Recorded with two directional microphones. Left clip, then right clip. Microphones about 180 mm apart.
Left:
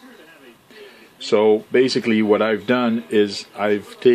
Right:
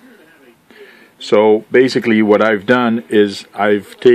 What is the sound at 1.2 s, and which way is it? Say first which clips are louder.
Speech: right 5 dB; 40° right (ahead or behind).